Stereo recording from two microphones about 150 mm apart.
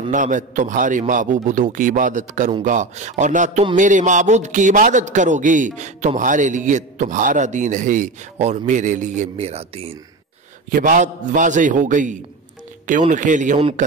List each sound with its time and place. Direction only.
0.1 s a man's voice: 55° right (ahead or behind)
10.7 s a man's voice: 60° right (ahead or behind)